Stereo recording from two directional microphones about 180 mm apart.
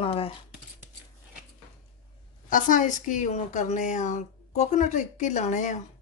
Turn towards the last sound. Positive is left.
turn(degrees=40)  # may be behind; listen again after turning